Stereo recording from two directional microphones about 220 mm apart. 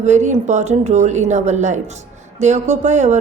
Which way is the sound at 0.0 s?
30° right (ahead or behind).